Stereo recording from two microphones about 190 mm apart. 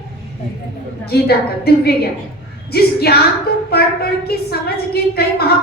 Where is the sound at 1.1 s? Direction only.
55° left (ahead or behind).